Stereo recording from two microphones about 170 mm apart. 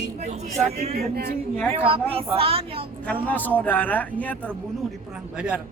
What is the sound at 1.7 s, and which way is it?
A woman's voice, 35° right (ahead or behind).